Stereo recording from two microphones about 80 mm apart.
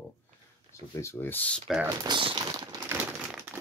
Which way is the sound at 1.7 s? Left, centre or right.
Centre.